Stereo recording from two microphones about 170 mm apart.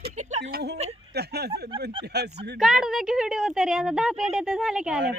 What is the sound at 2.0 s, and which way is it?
Speech, 75° right (ahead or behind).